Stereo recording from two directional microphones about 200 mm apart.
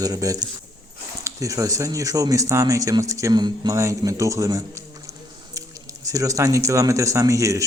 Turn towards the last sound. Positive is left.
turn(degrees=-15)  # may be behind; listen again after turning